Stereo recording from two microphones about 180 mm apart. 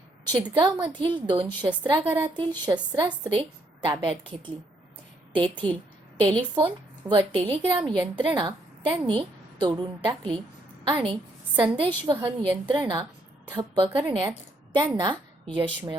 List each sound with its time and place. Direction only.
0.3 s a woman's voice: 25° right (ahead or behind)